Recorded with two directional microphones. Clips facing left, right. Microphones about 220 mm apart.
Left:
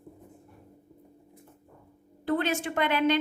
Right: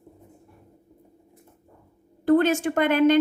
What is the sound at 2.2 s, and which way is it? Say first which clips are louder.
Speech: right 9 dB; 45° right (ahead or behind).